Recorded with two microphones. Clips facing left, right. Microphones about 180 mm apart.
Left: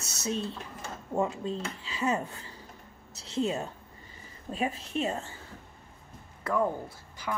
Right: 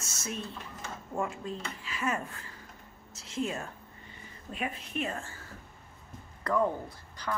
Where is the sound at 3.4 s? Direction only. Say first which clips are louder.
Left 4 dB; 20° left (ahead or behind).